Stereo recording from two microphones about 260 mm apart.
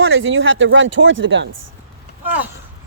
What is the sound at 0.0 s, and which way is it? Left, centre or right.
Speech, right.